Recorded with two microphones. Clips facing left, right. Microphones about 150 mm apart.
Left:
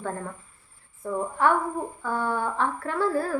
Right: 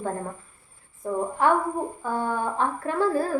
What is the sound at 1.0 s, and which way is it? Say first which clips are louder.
A woman's voice: right 1 dB; 15° right (ahead or behind).